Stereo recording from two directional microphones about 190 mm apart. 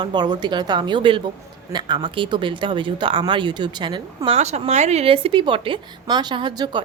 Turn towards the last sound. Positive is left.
turn(degrees=-20)  # may be behind; listen again after turning